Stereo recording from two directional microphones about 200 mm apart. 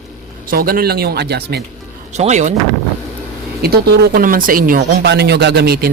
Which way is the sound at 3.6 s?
50° right (ahead or behind).